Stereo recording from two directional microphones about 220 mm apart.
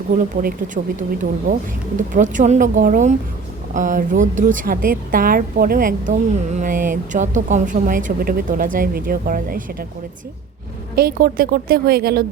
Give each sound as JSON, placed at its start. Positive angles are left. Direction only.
{"t": 0.2, "sound": "a woman's voice", "side_deg": -35}
{"t": 2.1, "sound": "a woman's voice", "side_deg": -35}
{"t": 10.9, "sound": "a woman's voice", "side_deg": -45}